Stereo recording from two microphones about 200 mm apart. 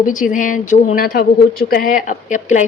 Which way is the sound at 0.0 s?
40° left (ahead or behind).